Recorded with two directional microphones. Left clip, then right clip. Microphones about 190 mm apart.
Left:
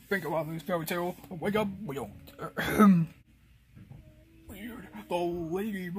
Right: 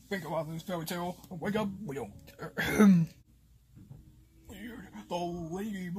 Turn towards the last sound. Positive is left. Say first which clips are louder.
# left 5 dB
turn(degrees=15)  # may be behind; listen again after turning